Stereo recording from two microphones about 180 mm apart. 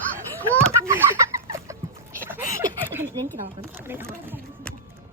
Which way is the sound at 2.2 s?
10° right (ahead or behind).